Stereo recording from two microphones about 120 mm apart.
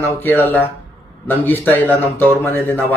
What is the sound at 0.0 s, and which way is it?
Speech, 15° left (ahead or behind).